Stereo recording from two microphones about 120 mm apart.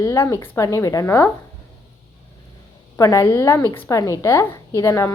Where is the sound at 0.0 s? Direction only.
25° left (ahead or behind).